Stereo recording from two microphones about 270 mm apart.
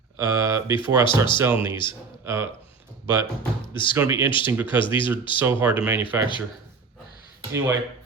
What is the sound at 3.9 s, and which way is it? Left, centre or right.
Speech, centre.